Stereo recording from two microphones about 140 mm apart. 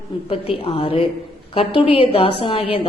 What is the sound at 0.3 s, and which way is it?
A woman's voice, 40° left (ahead or behind).